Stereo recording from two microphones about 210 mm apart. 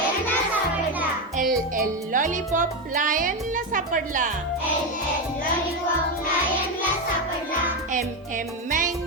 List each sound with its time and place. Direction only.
1.4 s music: 40° right (ahead or behind)
2.6 s a woman's voice: 40° right (ahead or behind)